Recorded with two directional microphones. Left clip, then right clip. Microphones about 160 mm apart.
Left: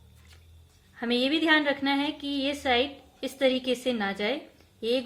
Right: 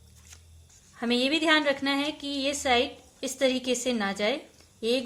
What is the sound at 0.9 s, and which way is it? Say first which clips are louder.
A woman's voice: even; 20° right (ahead or behind).